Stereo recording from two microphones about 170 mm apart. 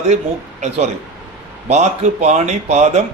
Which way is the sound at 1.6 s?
40° right (ahead or behind).